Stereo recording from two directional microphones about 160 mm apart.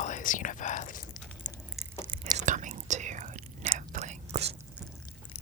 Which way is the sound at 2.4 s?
50° right (ahead or behind).